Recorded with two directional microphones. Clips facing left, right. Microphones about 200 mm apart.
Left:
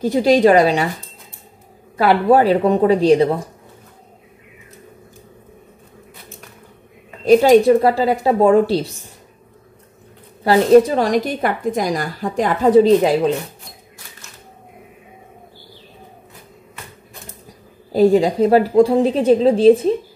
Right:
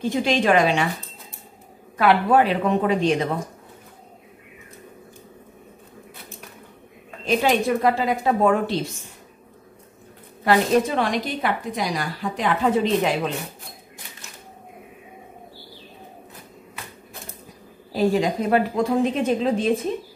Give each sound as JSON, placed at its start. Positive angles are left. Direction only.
{"t": 0.0, "sound": "speech", "side_deg": 35}
{"t": 2.0, "sound": "speech", "side_deg": 35}
{"t": 7.2, "sound": "speech", "side_deg": 35}
{"t": 10.4, "sound": "a woman's voice", "side_deg": 35}
{"t": 17.9, "sound": "speech", "side_deg": 35}